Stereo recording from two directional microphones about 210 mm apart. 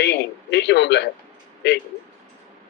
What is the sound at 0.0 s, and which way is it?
A man's voice, 55° left (ahead or behind).